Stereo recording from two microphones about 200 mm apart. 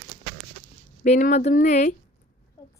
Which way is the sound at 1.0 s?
40° left (ahead or behind).